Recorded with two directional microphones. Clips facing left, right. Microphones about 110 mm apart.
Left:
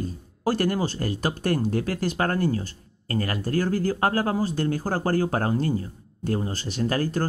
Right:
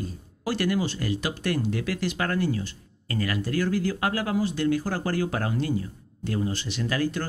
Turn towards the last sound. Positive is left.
turn(degrees=40)  # may be behind; listen again after turning